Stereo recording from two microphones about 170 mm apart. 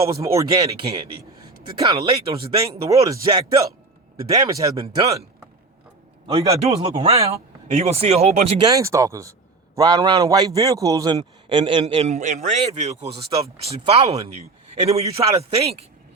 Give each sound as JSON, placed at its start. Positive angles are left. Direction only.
{"t": 0.0, "sound": "a man's voice", "side_deg": -20}
{"t": 1.8, "sound": "a man's voice", "side_deg": -20}
{"t": 2.0, "sound": "speech", "side_deg": -30}
{"t": 2.9, "sound": "a man's voice", "side_deg": -20}
{"t": 6.5, "sound": "speech", "side_deg": -35}
{"t": 8.7, "sound": "a man's voice", "side_deg": -20}